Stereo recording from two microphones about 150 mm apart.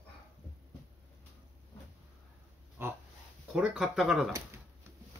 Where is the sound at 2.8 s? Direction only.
15° right (ahead or behind).